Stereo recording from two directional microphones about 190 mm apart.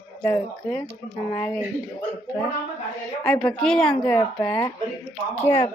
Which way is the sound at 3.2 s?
5° left (ahead or behind).